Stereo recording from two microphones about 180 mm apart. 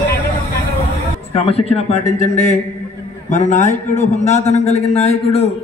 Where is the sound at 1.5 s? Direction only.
35° left (ahead or behind).